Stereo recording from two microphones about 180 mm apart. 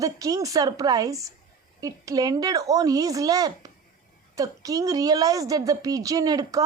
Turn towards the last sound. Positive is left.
turn(degrees=-20)  # may be behind; listen again after turning